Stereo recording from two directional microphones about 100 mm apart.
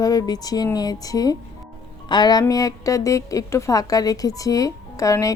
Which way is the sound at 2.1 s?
45° left (ahead or behind).